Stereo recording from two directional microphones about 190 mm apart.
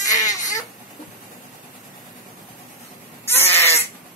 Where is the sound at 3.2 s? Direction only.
10° left (ahead or behind).